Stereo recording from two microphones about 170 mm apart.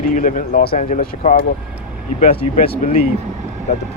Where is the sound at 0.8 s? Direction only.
45° left (ahead or behind).